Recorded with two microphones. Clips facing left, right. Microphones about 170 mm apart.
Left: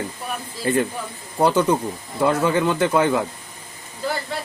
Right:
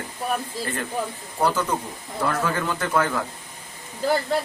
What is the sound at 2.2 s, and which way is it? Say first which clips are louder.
Speech: left 6 dB; 20° left (ahead or behind).